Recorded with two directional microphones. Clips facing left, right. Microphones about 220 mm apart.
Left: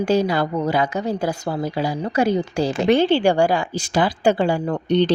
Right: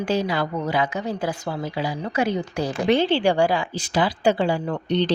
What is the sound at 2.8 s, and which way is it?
A woman's voice, 45° left (ahead or behind).